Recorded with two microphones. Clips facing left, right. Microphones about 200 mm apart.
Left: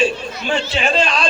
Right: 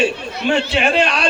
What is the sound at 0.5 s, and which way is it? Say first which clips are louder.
Speech: right 1 dB; 60° right (ahead or behind).